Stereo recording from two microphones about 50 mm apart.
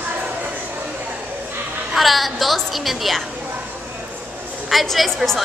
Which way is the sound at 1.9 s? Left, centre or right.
Centre.